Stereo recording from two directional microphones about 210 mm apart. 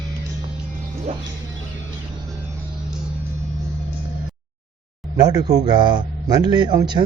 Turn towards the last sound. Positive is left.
turn(degrees=-20)  # may be behind; listen again after turning